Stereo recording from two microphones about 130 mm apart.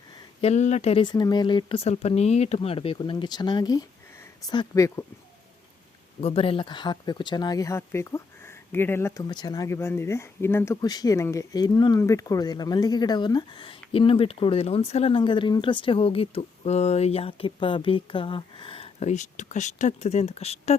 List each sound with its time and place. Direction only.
0.4 s speech: 60° left (ahead or behind)
1.0 s speech: 35° left (ahead or behind)
1.8 s speech: 55° left (ahead or behind); by 5.0 s 25° left (ahead or behind)
6.2 s speech: 45° left (ahead or behind); by 9.2 s 20° left (ahead or behind)
9.3 s speech: 30° left (ahead or behind)
10.8 s speech: 30° left (ahead or behind)
19.0 s speech: 70° left (ahead or behind)